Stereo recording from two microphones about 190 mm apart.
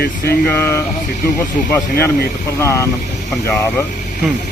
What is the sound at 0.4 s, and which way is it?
Speech, 10° left (ahead or behind).